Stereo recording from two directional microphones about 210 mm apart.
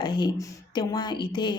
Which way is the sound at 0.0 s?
20° left (ahead or behind).